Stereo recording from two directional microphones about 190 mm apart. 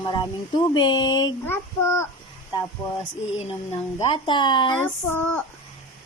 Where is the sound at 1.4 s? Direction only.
10° left (ahead or behind).